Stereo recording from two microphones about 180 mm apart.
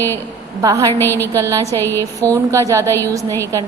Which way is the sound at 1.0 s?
10° left (ahead or behind).